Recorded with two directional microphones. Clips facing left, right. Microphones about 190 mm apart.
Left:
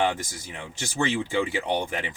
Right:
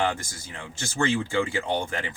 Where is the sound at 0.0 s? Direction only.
15° left (ahead or behind).